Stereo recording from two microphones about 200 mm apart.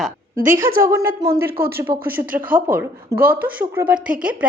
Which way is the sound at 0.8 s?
15° right (ahead or behind).